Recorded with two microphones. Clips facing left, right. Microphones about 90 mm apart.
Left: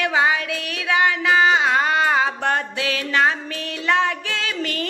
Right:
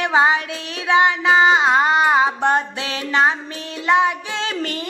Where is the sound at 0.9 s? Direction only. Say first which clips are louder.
Right 3 dB; 25° right (ahead or behind).